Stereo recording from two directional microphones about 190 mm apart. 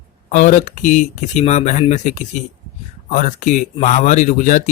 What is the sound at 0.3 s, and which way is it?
Speech, 40° left (ahead or behind).